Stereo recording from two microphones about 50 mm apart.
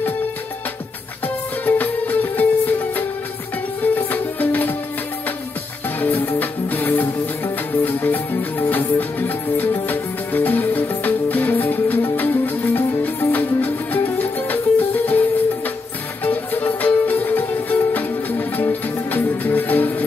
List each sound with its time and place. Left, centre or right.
1.2 s music: left
5.9 s music: left